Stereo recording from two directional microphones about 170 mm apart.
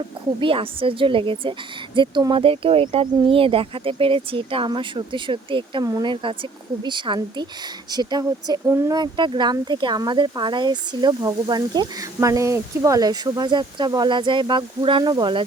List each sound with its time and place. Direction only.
0.3 s a woman's voice: 30° right (ahead or behind)